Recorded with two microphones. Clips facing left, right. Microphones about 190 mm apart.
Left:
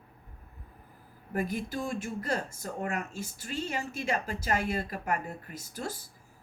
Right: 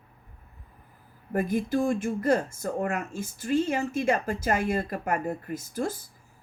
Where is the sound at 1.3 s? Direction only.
50° right (ahead or behind).